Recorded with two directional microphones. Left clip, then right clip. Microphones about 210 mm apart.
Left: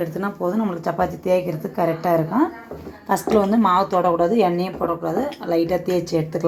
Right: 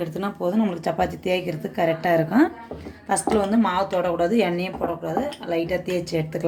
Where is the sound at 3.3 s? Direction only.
5° left (ahead or behind).